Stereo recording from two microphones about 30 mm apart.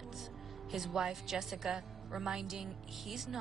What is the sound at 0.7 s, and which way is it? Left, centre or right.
A woman's voice, centre.